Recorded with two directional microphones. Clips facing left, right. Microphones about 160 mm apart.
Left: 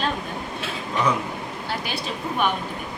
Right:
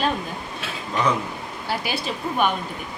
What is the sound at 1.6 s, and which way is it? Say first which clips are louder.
Speech: right 4 dB; 5° right (ahead or behind).